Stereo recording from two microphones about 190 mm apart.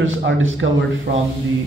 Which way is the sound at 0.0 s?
90° right.